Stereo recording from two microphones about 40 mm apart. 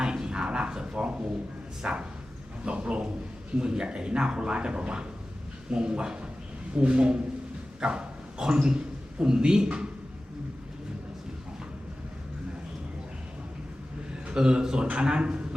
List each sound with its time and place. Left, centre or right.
0.0 s a sound: right
1.8 s a man's voice: right
7.8 s dog: right
8.6 s a man's voice: right
14.3 s a man's voice: right